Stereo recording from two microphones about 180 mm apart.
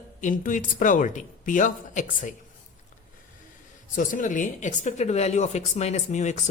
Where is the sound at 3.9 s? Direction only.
45° left (ahead or behind).